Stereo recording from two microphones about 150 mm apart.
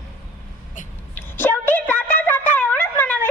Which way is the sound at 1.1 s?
15° left (ahead or behind).